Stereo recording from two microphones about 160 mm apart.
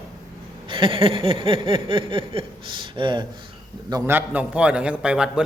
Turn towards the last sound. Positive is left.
turn(degrees=-5)  # may be behind; listen again after turning